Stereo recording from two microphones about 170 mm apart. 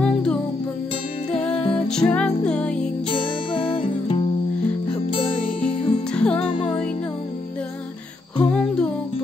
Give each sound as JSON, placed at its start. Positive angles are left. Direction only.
{"t": 0.0, "sound": "music", "side_deg": 5}
{"t": 1.9, "sound": "music", "side_deg": 5}
{"t": 3.1, "sound": "music", "side_deg": 30}
{"t": 5.7, "sound": "music", "side_deg": 40}
{"t": 6.1, "sound": "music", "side_deg": 5}
{"t": 8.4, "sound": "music", "side_deg": 5}